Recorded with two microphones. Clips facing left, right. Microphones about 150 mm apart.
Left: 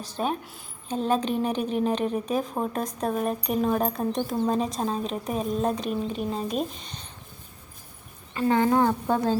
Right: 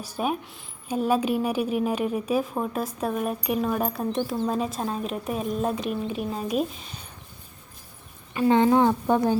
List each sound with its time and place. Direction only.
0.0 s a woman's voice: 10° right (ahead or behind)
8.3 s a woman's voice: 15° right (ahead or behind)